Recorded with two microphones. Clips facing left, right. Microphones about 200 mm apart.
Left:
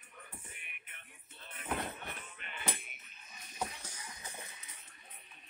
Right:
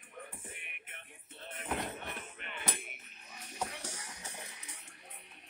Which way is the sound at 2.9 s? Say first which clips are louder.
Right 5 dB; 70° right (ahead or behind).